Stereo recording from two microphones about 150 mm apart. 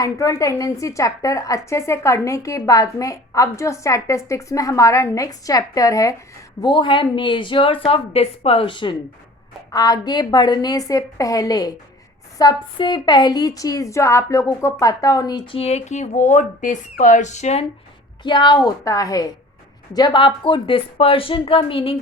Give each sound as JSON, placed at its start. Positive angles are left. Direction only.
{"t": 0.0, "sound": "a woman's voice", "side_deg": 20}
{"t": 15.6, "sound": "speech", "side_deg": 50}
{"t": 18.2, "sound": "a woman's voice", "side_deg": 30}